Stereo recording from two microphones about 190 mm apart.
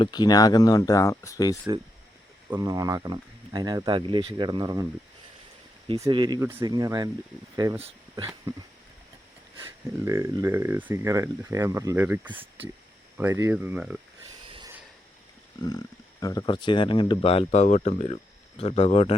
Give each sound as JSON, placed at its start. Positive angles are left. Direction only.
{"t": 0.0, "sound": "speech", "side_deg": 20}
{"t": 2.5, "sound": "speech", "side_deg": -20}
{"t": 6.0, "sound": "speech", "side_deg": -25}
{"t": 10.1, "sound": "speech", "side_deg": -15}
{"t": 14.4, "sound": "a sound", "side_deg": -25}
{"t": 16.2, "sound": "speech", "side_deg": 20}